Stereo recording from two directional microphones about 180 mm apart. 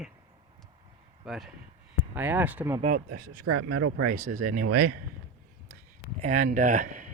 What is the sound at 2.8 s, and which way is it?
Speech, 45° right (ahead or behind).